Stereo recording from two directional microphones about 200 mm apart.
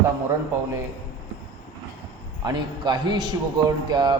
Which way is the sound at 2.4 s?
20° right (ahead or behind).